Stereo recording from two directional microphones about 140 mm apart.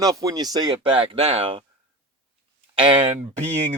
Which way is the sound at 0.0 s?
25° right (ahead or behind).